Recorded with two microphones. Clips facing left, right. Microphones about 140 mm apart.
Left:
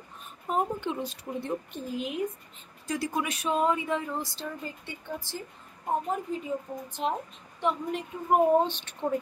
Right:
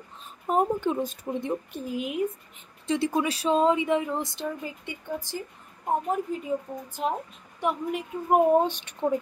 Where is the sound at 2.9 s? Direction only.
25° right (ahead or behind).